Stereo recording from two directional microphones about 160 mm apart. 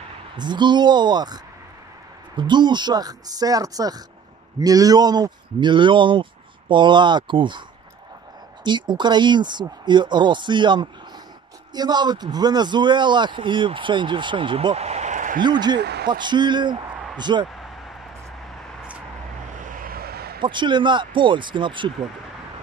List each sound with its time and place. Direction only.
0.4 s a man's voice: 30° right (ahead or behind)
8.6 s a man's voice: 30° right (ahead or behind); by 15.4 s 55° right (ahead or behind)
15.4 s a man's voice: 25° right (ahead or behind)
15.8 s a sound: 90° right
16.1 s a man's voice: 30° right (ahead or behind)
19.6 s vehicle: 60° right (ahead or behind); by 20.4 s 75° right (ahead or behind)
20.4 s a man's voice: 30° right (ahead or behind)